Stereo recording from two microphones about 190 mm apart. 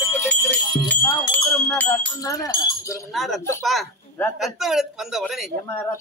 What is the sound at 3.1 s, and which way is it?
A man's voice, centre (ahead or behind).